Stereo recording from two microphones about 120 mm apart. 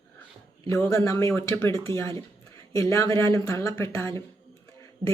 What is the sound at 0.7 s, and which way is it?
Speech, 20° left (ahead or behind).